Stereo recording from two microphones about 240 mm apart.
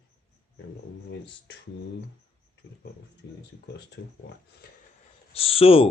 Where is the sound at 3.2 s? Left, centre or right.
Left.